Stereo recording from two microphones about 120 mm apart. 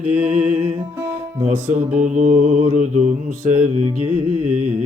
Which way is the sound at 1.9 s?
90° right.